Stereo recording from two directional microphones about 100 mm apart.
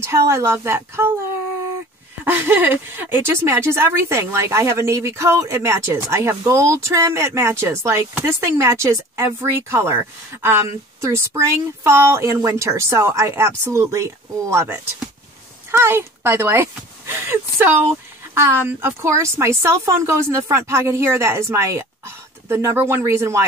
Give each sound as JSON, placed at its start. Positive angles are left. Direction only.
{"t": 0.0, "sound": "speech", "side_deg": -25}
{"t": 2.2, "sound": "speech", "side_deg": -20}